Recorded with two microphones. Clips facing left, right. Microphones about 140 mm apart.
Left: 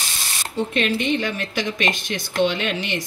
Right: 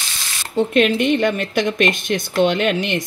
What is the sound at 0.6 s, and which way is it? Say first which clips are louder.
Speech: right 7 dB; 55° right (ahead or behind).